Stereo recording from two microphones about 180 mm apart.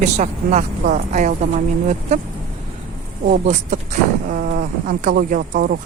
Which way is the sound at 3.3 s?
45° right (ahead or behind).